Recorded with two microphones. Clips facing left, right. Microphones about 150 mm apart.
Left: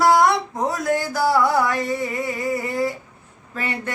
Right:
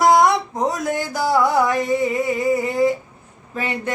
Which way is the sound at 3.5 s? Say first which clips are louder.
Right 3 dB; 20° right (ahead or behind).